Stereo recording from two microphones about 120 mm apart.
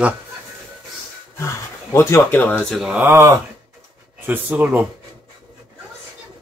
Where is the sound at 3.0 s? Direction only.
20° right (ahead or behind).